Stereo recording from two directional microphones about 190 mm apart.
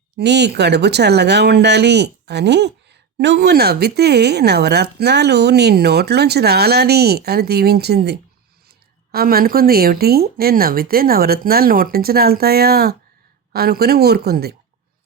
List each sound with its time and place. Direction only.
0.2 s speech: 60° right (ahead or behind)